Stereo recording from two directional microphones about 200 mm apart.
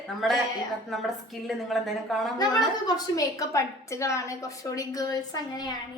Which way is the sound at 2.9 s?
15° left (ahead or behind).